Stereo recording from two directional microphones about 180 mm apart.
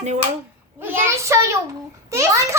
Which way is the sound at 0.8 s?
10° right (ahead or behind).